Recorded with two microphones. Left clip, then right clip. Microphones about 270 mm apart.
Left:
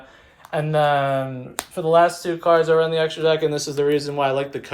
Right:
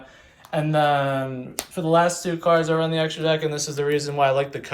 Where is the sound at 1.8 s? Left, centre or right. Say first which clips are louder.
Left 3 dB; left.